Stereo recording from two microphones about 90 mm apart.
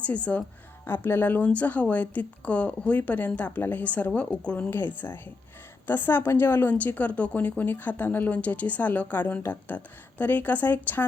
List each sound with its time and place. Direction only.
0.0 s a woman's voice: 15° left (ahead or behind)